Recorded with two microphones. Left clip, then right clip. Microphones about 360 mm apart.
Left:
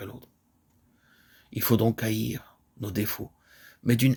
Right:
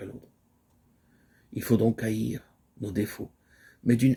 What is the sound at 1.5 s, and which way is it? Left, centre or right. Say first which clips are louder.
Speech: even; left.